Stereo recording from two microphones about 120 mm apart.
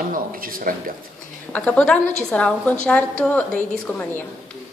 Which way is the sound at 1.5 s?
10° left (ahead or behind).